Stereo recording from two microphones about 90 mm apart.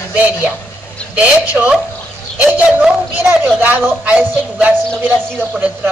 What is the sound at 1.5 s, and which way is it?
Speech, 5° right (ahead or behind).